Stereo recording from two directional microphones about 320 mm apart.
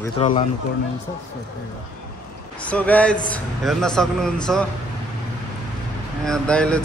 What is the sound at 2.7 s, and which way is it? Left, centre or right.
Speech, centre.